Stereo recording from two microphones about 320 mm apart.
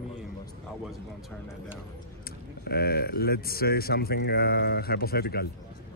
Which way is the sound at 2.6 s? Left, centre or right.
Left.